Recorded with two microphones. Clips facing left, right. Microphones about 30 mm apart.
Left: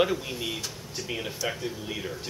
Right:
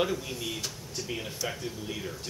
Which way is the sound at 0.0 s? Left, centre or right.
Centre.